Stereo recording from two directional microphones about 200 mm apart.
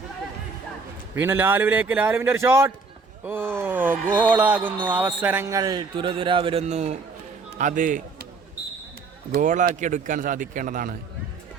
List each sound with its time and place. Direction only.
1.1 s a man's voice: 10° right (ahead or behind); by 8.3 s 45° right (ahead or behind)
9.3 s speech: 40° right (ahead or behind)